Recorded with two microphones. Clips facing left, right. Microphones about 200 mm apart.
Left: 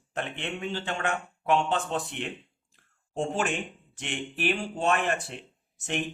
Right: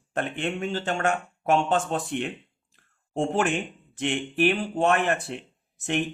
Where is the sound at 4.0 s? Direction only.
55° right (ahead or behind).